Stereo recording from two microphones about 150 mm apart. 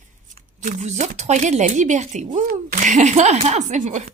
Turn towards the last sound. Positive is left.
turn(degrees=-50)  # may be behind; listen again after turning